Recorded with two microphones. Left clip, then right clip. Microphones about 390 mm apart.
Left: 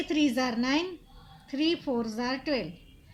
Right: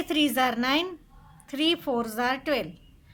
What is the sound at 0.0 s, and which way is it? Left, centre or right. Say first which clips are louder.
A woman's voice: right 3 dB; right.